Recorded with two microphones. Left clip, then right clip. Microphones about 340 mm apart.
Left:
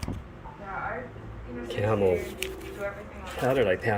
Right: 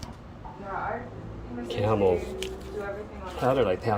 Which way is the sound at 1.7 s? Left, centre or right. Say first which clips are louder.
Right 1 dB; centre.